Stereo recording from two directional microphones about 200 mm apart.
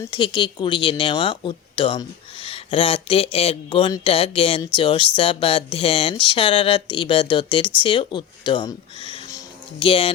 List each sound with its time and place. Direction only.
0.1 s speech: 25° left (ahead or behind)